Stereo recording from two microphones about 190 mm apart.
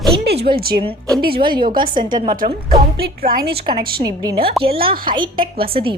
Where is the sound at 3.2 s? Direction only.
50° right (ahead or behind).